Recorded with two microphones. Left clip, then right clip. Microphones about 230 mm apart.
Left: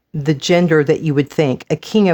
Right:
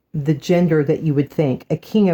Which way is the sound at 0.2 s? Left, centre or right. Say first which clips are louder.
Left 4 dB; left.